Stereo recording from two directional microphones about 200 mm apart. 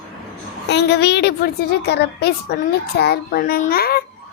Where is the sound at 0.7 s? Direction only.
60° left (ahead or behind).